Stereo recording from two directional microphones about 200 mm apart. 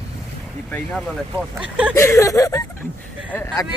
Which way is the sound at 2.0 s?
15° left (ahead or behind).